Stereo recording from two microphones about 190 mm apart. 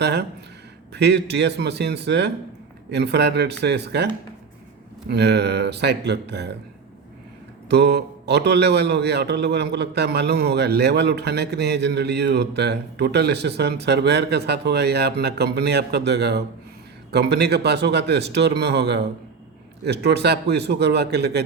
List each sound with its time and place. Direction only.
0.0 s a man's voice: 60° right (ahead or behind)
7.7 s a man's voice: 60° right (ahead or behind)